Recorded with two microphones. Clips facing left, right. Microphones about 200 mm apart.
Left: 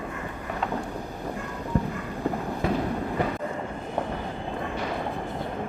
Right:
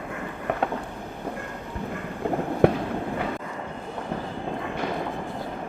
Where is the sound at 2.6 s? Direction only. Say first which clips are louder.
Right 8 dB; 60° right (ahead or behind).